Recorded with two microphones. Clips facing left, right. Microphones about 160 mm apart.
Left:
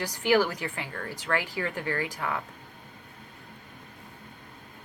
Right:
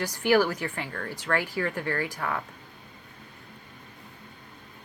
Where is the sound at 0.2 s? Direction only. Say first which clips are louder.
Right 1 dB; 15° left (ahead or behind).